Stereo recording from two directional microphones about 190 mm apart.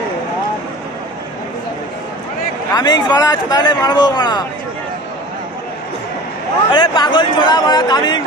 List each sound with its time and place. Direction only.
2.7 s a man's voice: 20° left (ahead or behind)
6.7 s a man's voice: 25° left (ahead or behind)